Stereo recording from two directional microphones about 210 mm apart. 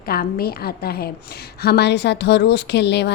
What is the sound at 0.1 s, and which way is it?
A woman's voice, 45° left (ahead or behind).